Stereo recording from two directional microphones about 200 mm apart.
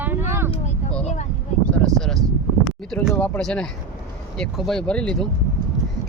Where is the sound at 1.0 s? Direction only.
35° left (ahead or behind).